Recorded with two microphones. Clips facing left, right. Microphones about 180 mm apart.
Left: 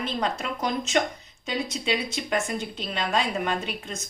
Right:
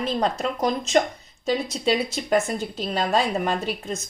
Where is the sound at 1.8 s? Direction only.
40° right (ahead or behind).